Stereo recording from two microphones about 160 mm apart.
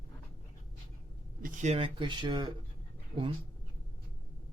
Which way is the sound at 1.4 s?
55° right (ahead or behind).